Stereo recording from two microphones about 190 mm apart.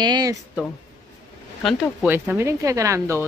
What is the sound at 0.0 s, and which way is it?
Speech, 20° right (ahead or behind).